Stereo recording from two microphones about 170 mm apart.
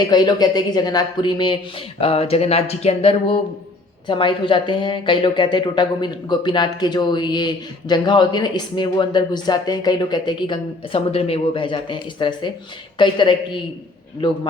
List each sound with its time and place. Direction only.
0.0 s speech: 25° left (ahead or behind)